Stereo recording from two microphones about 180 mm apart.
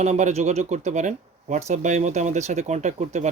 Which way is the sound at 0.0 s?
40° right (ahead or behind).